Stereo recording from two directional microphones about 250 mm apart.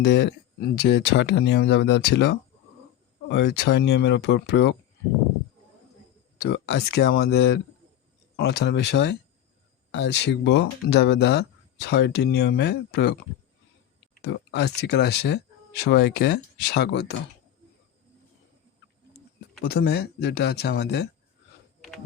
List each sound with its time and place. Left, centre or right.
0.0 s speech: left
6.4 s speech: left
14.3 s speech: left
19.6 s speech: left